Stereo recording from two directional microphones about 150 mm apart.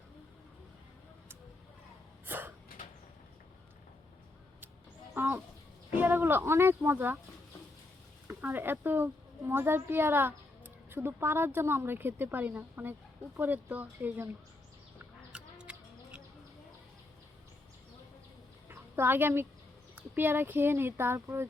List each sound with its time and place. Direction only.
2.2 s a sound: 15° right (ahead or behind)
5.1 s a sound: 15° right (ahead or behind)
6.0 s speech: 15° right (ahead or behind)
8.3 s speech: 15° right (ahead or behind)
15.3 s bird: 5° right (ahead or behind)
18.7 s speech: 15° right (ahead or behind)